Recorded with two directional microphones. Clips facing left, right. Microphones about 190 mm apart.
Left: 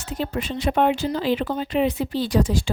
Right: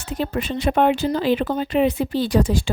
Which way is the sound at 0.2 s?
60° right (ahead or behind).